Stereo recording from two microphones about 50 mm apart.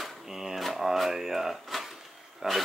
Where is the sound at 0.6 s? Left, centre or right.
Centre.